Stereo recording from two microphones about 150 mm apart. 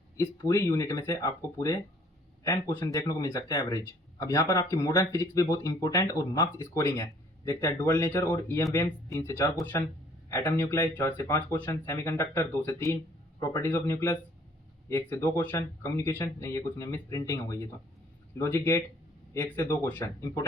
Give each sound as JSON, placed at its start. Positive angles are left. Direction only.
{"t": 0.2, "sound": "speech", "side_deg": 20}